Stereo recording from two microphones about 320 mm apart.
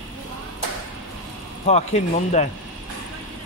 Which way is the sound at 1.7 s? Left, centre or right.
Left.